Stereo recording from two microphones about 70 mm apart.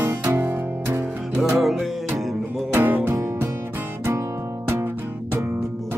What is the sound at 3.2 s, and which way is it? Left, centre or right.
Music, right.